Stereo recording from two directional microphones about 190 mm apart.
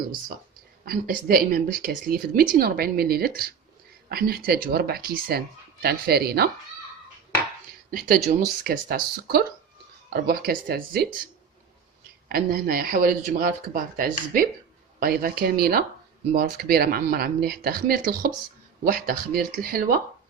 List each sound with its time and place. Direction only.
0.9 s a woman's voice: 50° right (ahead or behind)
7.9 s a woman's voice: 50° right (ahead or behind)
12.3 s a woman's voice: 50° right (ahead or behind)